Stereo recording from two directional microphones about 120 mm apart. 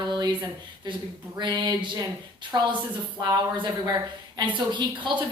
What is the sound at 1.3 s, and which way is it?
A woman's voice, 40° right (ahead or behind).